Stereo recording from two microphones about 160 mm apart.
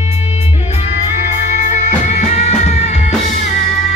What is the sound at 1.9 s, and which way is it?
Music, 45° left (ahead or behind).